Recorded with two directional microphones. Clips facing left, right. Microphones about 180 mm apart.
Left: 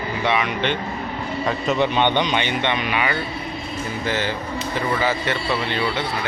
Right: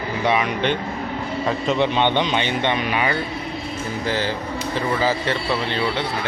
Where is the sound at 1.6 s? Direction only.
25° right (ahead or behind).